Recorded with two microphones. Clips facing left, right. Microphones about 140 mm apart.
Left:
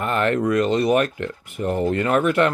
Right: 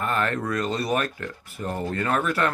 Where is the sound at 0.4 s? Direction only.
20° left (ahead or behind).